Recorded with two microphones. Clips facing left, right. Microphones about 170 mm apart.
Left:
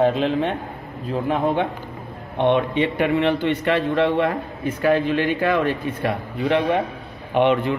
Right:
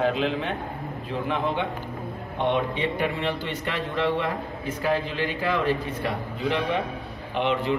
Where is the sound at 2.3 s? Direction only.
60° left (ahead or behind).